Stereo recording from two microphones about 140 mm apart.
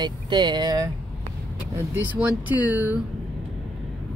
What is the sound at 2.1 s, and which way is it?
Speech, 10° right (ahead or behind).